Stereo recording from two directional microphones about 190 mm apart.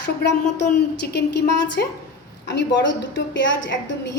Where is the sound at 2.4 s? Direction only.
75° left (ahead or behind).